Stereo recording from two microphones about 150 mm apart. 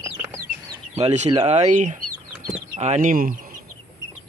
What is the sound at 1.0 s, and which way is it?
Speech, 45° right (ahead or behind).